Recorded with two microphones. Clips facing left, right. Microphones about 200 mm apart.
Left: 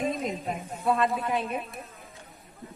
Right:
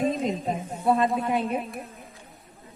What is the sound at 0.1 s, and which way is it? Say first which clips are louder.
Speech: right 4 dB; 30° right (ahead or behind).